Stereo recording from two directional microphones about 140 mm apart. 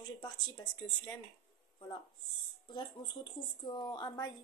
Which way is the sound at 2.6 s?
35° left (ahead or behind).